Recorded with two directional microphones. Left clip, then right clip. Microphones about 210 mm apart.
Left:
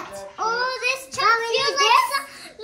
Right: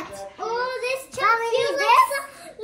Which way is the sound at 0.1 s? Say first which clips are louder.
Left 5 dB; centre (ahead or behind).